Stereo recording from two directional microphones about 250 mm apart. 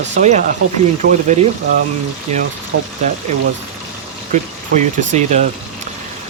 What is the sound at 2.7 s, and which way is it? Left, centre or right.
Speech, right.